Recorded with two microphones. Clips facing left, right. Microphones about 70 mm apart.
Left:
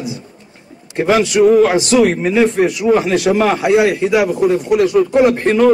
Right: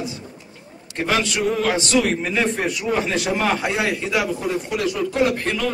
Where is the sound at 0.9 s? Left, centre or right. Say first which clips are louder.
Left 8 dB; left.